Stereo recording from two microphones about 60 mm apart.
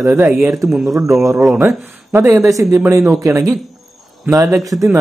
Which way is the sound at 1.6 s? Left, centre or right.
Right.